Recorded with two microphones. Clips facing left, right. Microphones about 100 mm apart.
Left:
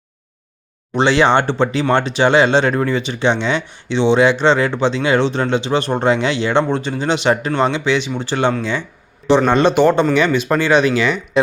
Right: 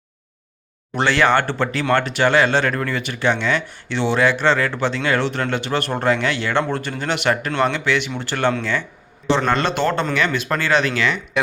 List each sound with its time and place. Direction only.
0.9 s speech: 20° left (ahead or behind)